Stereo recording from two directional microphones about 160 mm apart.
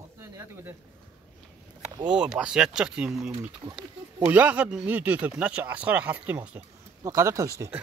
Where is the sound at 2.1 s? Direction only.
5° right (ahead or behind).